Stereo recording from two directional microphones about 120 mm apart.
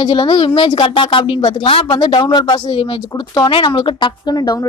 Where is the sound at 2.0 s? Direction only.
40° left (ahead or behind).